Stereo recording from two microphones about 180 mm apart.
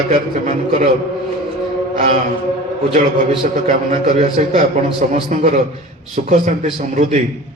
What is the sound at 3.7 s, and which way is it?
Speech, 50° right (ahead or behind).